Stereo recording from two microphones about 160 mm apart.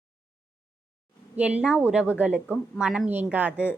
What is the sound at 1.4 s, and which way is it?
A woman's voice, 5° right (ahead or behind).